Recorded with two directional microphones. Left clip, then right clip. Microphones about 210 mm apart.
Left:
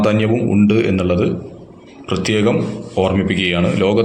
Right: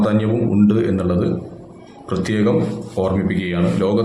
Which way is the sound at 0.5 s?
15° left (ahead or behind).